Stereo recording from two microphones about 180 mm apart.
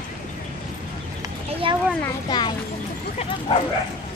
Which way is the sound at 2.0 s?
25° left (ahead or behind).